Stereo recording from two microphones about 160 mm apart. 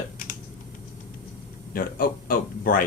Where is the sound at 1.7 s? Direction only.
60° left (ahead or behind).